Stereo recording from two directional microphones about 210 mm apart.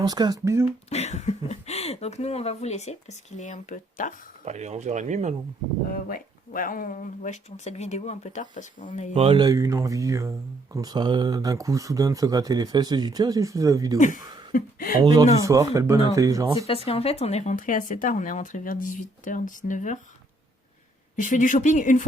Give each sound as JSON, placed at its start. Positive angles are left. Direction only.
{"t": 0.0, "sound": "speech", "side_deg": -20}
{"t": 0.9, "sound": "speech", "side_deg": 30}
{"t": 4.4, "sound": "speech", "side_deg": -35}
{"t": 5.9, "sound": "speech", "side_deg": 40}
{"t": 9.1, "sound": "speech", "side_deg": -25}
{"t": 14.0, "sound": "speech", "side_deg": 40}
{"t": 15.0, "sound": "speech", "side_deg": -20}
{"t": 16.6, "sound": "speech", "side_deg": 25}
{"t": 21.2, "sound": "speech", "side_deg": 35}